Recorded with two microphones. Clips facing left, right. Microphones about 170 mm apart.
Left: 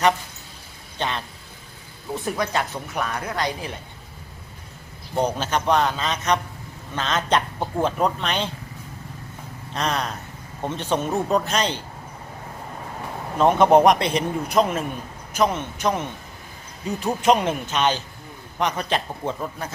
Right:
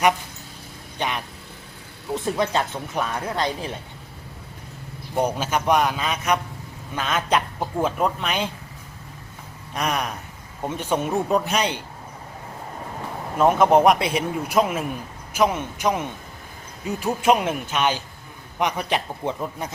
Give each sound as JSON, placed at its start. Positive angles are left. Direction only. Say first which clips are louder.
{"t": 0.9, "sound": "vehicle", "louder": "even", "side_deg": -15}
{"t": 2.1, "sound": "speech", "louder": "right 2 dB", "side_deg": -25}
{"t": 5.1, "sound": "speech", "louder": "even", "side_deg": -10}
{"t": 9.7, "sound": "speech", "louder": "even", "side_deg": -10}
{"t": 13.4, "sound": "speech", "louder": "left 1 dB", "side_deg": 0}